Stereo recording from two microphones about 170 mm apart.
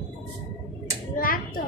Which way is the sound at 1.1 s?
55° left (ahead or behind).